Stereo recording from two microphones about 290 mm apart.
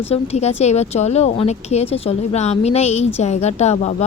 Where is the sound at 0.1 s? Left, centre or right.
Left.